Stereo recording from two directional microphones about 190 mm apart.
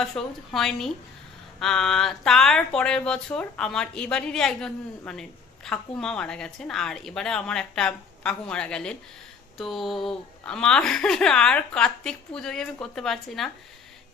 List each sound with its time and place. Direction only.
0.0 s speech: centre (ahead or behind)